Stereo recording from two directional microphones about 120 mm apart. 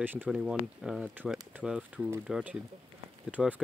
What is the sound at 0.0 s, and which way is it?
Speech, 15° right (ahead or behind).